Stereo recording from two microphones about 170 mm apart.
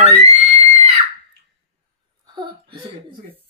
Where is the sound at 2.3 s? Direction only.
30° right (ahead or behind).